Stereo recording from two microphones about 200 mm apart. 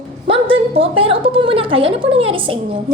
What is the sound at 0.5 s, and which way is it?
A woman's voice, 30° right (ahead or behind).